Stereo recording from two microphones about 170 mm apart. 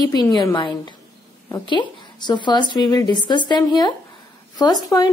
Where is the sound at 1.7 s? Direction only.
25° left (ahead or behind).